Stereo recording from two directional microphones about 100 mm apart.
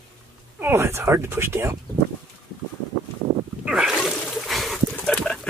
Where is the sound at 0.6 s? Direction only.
25° right (ahead or behind).